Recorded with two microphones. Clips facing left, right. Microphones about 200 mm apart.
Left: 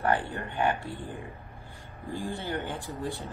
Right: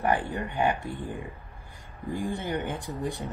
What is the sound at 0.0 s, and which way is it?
Speech, 15° right (ahead or behind).